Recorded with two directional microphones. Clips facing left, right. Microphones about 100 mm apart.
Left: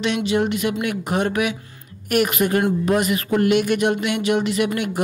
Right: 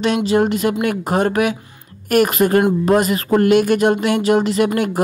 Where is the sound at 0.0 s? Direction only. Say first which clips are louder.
Right 5 dB; 40° right (ahead or behind).